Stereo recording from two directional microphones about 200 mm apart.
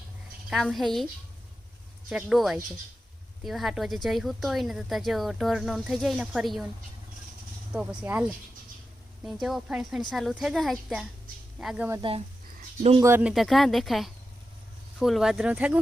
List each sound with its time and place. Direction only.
0.5 s speech: centre (ahead or behind)
2.0 s speech: centre (ahead or behind)
7.7 s speech: 5° right (ahead or behind)
9.2 s speech: centre (ahead or behind)
13.0 s speech: 10° right (ahead or behind)